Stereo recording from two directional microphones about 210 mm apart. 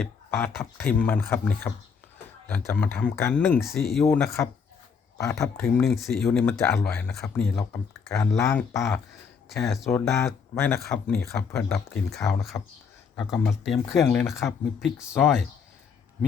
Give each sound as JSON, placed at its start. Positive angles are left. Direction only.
{"t": 0.0, "sound": "speech", "side_deg": 10}
{"t": 5.6, "sound": "speech", "side_deg": 0}
{"t": 9.5, "sound": "speech", "side_deg": 0}
{"t": 9.9, "sound": "speech", "side_deg": 15}
{"t": 13.1, "sound": "speech", "side_deg": 0}